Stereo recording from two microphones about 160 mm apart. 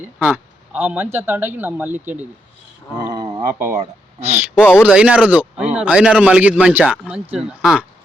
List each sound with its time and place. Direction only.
0.0 s a man's voice: 10° right (ahead or behind)
3.3 s a man's voice: 15° right (ahead or behind)